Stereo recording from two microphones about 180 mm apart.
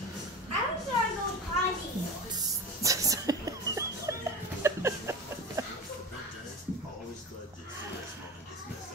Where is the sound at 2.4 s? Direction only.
20° right (ahead or behind).